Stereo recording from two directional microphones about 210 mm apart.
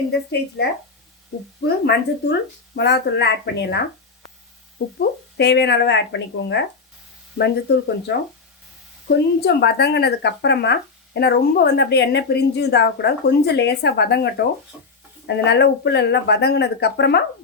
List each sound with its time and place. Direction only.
0.1 s speech: 50° left (ahead or behind)
1.6 s speech: 50° left (ahead or behind)
4.9 s speech: 50° left (ahead or behind)